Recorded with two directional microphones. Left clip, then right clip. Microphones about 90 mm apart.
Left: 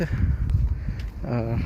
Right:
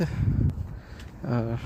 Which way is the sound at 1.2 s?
20° right (ahead or behind).